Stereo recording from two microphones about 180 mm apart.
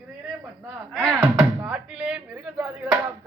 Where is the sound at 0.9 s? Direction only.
5° left (ahead or behind).